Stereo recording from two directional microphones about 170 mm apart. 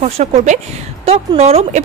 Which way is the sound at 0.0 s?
45° right (ahead or behind).